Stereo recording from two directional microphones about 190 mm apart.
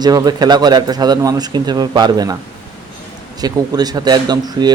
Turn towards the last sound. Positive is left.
turn(degrees=-20)  # may be behind; listen again after turning